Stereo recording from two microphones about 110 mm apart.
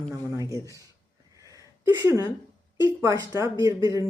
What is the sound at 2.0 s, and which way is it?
Speech, 30° right (ahead or behind).